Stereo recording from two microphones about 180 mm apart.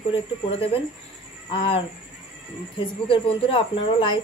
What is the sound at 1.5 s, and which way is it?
Speech, 30° left (ahead or behind).